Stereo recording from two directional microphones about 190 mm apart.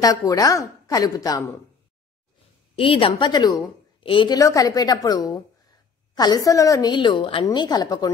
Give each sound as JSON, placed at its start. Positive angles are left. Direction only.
{"t": 0.0, "sound": "a woman's voice", "side_deg": 20}
{"t": 2.8, "sound": "a woman's voice", "side_deg": 30}
{"t": 4.4, "sound": "a woman's voice", "side_deg": 15}